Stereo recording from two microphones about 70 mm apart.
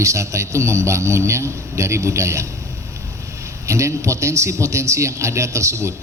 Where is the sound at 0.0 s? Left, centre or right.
Right.